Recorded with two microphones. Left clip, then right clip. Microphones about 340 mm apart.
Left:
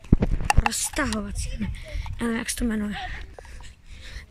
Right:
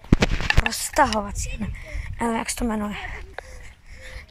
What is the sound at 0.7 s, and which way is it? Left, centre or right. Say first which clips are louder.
A woman's voice: right 8 dB; centre.